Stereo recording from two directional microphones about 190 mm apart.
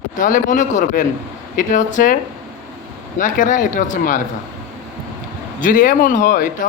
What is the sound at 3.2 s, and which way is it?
A man's voice, 45° left (ahead or behind).